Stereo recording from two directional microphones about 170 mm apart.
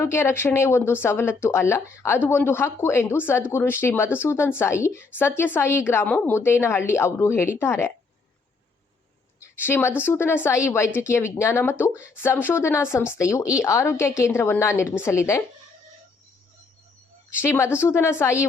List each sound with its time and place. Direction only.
0.0 s speech: 15° left (ahead or behind)
9.4 s a sound: 15° left (ahead or behind)
10.0 s speech: 15° left (ahead or behind)
17.3 s speech: 15° left (ahead or behind)